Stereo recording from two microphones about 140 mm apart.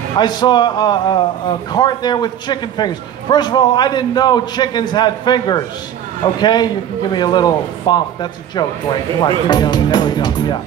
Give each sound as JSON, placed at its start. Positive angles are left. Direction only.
{"t": 0.2, "sound": "a man's voice", "side_deg": 30}